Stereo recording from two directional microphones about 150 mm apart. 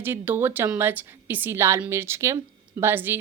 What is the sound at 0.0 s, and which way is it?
A woman's voice, 15° right (ahead or behind).